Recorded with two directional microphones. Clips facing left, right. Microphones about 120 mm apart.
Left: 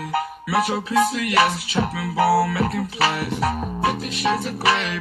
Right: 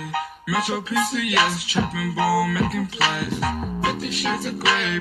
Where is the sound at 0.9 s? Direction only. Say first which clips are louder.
Left 3 dB; 35° left (ahead or behind).